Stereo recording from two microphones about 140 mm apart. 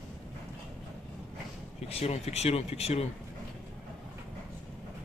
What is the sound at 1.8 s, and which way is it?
Speech, 45° left (ahead or behind).